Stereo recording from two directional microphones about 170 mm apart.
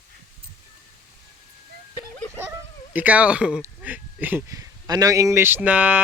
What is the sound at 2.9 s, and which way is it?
Speech, 10° right (ahead or behind).